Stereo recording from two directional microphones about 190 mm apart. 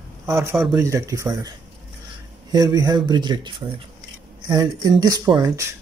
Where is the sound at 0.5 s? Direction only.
Centre (ahead or behind).